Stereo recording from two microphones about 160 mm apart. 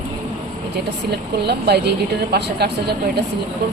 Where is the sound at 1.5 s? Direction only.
90° right.